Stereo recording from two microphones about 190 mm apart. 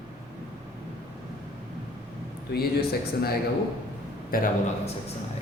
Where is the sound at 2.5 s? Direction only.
55° left (ahead or behind).